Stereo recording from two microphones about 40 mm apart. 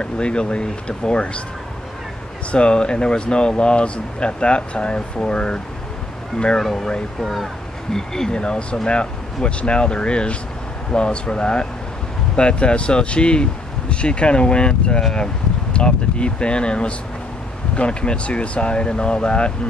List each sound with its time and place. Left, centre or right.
0.0 s speech: left
2.5 s speech: left
6.6 s speech: centre
7.9 s speech: centre
8.3 s speech: left